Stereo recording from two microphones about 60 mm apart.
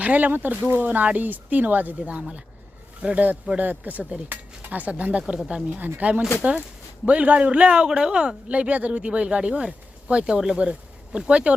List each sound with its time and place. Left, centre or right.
0.0 s speech: right